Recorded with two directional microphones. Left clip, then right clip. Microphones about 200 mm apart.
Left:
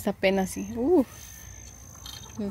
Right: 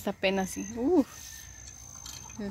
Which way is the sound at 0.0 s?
15° left (ahead or behind).